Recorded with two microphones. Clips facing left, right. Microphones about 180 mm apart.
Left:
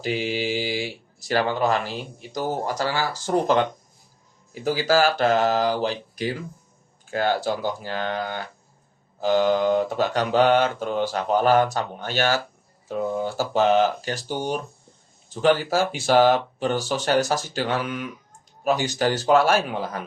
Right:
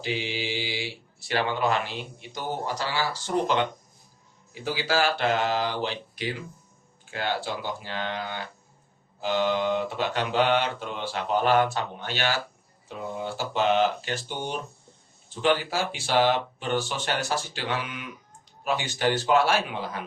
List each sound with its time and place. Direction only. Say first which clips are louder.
0.0 s speech: left 5 dB; 45° left (ahead or behind)